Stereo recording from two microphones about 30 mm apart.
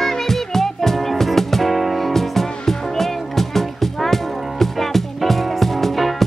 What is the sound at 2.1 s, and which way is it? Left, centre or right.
Music, centre.